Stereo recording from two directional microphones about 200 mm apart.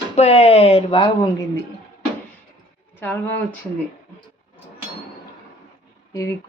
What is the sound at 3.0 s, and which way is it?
Speech, 10° left (ahead or behind).